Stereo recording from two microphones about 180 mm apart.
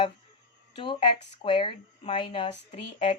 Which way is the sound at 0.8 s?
30° left (ahead or behind).